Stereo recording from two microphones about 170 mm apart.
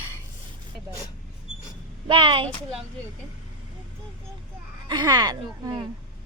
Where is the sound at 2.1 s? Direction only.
30° right (ahead or behind).